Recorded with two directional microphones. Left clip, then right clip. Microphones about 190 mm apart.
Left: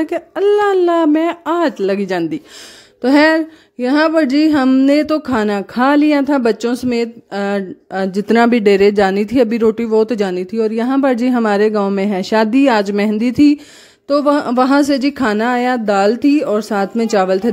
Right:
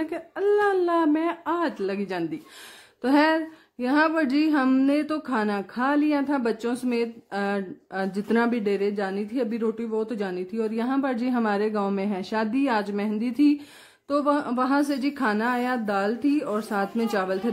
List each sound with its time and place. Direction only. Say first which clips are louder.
0.0 s speech: left 11 dB; 40° left (ahead or behind)